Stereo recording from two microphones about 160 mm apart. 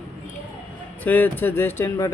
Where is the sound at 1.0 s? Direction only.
10° left (ahead or behind).